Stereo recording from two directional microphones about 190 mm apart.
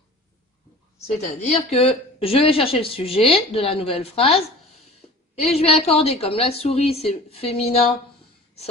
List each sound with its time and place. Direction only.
1.4 s speech: 35° left (ahead or behind)
5.4 s a woman's voice: 35° left (ahead or behind)